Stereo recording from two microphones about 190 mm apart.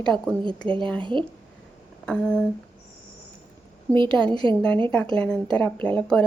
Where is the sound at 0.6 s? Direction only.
25° right (ahead or behind).